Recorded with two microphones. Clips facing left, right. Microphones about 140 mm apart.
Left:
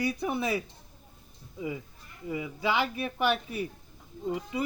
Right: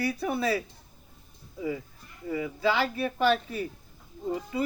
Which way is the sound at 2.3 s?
15° left (ahead or behind).